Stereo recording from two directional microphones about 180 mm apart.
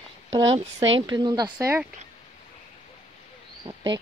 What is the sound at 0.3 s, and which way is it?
Speech, 30° right (ahead or behind).